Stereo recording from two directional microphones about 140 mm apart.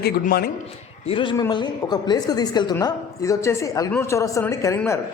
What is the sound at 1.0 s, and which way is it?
A woman's voice, 35° left (ahead or behind).